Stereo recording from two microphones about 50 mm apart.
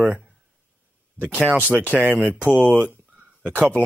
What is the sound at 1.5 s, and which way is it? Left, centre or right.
Speech, right.